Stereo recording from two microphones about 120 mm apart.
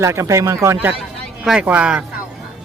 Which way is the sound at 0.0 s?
25° right (ahead or behind).